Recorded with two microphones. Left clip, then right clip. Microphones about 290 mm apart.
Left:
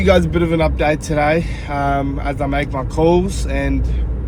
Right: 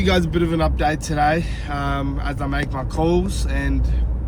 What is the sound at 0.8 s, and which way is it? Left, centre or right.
Speech, left.